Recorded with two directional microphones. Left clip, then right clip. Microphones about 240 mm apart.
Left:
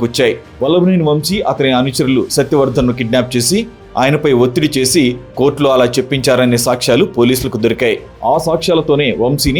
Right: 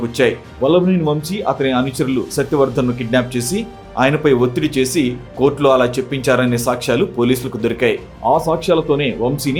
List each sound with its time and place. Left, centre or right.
0.0 s speech: left